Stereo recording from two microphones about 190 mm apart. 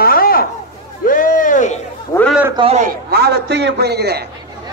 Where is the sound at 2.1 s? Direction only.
15° left (ahead or behind).